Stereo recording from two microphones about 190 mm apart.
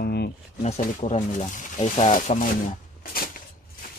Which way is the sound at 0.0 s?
55° left (ahead or behind).